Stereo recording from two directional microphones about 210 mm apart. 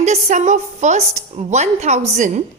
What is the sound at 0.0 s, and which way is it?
A woman's voice, 35° right (ahead or behind).